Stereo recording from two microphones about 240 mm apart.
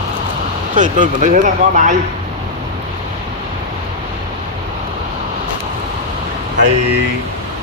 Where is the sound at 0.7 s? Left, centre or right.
Right.